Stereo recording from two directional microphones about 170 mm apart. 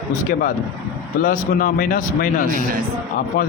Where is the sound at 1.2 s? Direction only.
50° left (ahead or behind).